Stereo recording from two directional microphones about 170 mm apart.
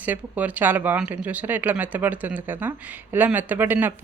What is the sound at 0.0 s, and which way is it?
Speech, 10° right (ahead or behind).